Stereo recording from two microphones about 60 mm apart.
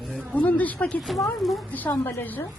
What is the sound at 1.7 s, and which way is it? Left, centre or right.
Speech, left.